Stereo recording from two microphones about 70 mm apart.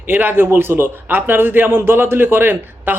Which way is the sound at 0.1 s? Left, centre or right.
Right.